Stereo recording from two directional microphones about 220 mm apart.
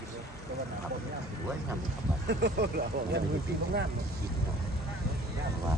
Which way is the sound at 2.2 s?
50° right (ahead or behind).